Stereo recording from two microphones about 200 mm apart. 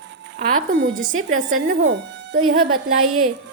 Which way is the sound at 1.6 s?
60° right (ahead or behind).